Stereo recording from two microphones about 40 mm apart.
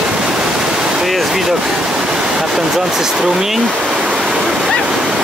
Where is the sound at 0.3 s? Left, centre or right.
Centre.